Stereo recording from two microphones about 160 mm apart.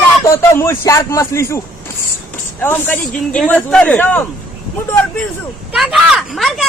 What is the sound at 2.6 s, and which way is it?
Speech, 10° left (ahead or behind).